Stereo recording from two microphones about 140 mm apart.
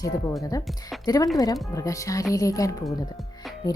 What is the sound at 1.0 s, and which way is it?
A woman's voice, 25° left (ahead or behind).